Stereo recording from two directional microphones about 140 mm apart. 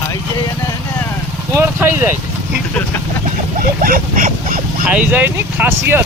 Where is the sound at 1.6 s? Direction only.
15° right (ahead or behind).